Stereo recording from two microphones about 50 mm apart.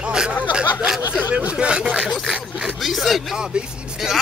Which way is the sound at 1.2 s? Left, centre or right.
Right.